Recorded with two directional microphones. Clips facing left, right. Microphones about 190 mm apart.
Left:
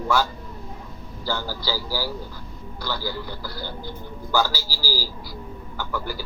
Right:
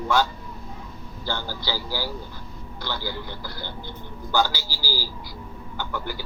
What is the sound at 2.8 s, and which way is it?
Speech, 20° right (ahead or behind).